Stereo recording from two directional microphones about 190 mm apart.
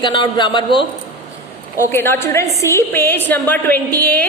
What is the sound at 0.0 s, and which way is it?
Speech, 25° left (ahead or behind).